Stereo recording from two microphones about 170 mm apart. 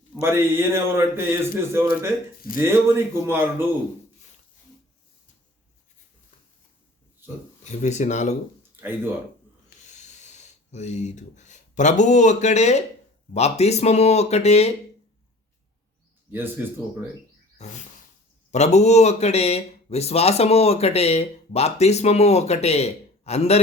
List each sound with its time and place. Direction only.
0.2 s a man's voice: 15° right (ahead or behind)
7.6 s speech: 45° left (ahead or behind)
9.8 s a sound: 45° left (ahead or behind)
13.3 s speech: 40° left (ahead or behind)
17.6 s speech: 40° left (ahead or behind)